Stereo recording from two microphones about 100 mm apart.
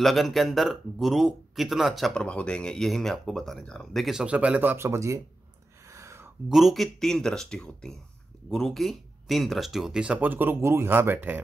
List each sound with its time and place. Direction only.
0.0 s speech: centre (ahead or behind)
2.2 s speech: 10° left (ahead or behind); by 5.2 s 30° right (ahead or behind)
5.9 s a sound: 30° right (ahead or behind)
6.5 s speech: centre (ahead or behind); by 11.4 s 20° right (ahead or behind)